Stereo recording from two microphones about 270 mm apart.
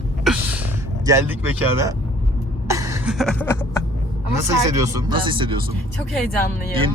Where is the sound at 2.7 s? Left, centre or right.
Centre.